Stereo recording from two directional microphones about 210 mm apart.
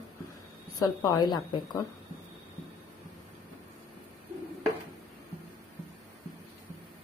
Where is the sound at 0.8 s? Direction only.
20° left (ahead or behind).